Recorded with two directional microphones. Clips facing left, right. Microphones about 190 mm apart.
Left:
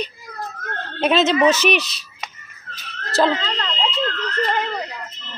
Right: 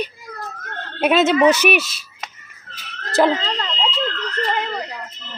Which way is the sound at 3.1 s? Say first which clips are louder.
Right 2 dB; 15° right (ahead or behind).